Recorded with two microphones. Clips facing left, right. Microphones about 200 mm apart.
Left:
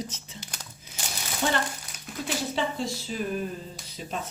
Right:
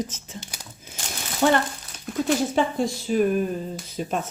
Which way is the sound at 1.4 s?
55° right (ahead or behind).